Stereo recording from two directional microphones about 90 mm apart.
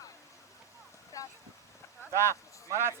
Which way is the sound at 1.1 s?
35° left (ahead or behind).